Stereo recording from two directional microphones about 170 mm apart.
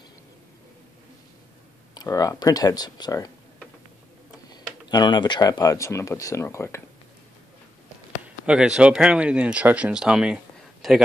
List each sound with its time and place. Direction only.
2.0 s speech: 20° left (ahead or behind)
4.5 s speech: 25° left (ahead or behind)
8.5 s speech: 5° right (ahead or behind)